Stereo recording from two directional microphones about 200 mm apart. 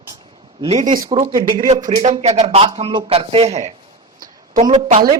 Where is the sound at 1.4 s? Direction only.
45° right (ahead or behind).